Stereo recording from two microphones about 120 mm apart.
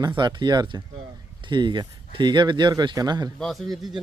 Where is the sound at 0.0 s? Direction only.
40° right (ahead or behind).